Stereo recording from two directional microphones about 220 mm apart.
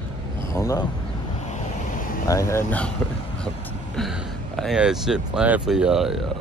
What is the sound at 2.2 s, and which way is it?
Speech, 15° left (ahead or behind).